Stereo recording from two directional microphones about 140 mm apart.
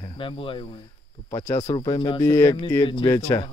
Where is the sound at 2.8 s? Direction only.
35° left (ahead or behind).